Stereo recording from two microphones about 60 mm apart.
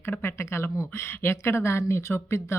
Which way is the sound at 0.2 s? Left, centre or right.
Left.